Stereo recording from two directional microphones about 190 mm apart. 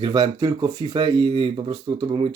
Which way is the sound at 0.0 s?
20° right (ahead or behind).